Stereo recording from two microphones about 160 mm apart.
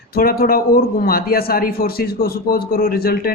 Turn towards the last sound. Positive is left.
turn(degrees=70)  # may be behind; listen again after turning